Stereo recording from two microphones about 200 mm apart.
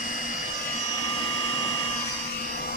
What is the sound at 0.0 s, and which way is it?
Vacuum cleaner, 40° left (ahead or behind).